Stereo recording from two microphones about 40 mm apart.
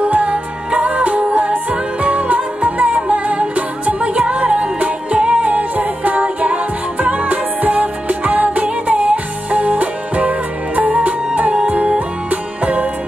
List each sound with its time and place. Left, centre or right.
0.0 s music: right
5.5 s music: right